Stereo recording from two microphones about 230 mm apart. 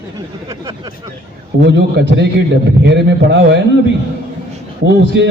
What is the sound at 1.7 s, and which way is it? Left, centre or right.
A man's voice, right.